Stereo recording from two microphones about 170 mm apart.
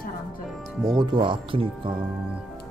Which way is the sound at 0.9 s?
25° right (ahead or behind).